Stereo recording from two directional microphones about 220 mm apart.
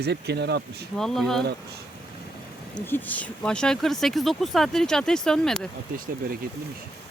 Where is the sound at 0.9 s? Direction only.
Centre (ahead or behind).